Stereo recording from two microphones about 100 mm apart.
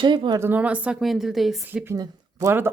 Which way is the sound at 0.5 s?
15° right (ahead or behind).